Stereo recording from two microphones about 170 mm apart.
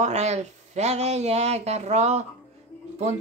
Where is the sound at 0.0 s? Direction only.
40° right (ahead or behind).